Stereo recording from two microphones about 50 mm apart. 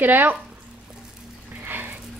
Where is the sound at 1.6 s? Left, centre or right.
Right.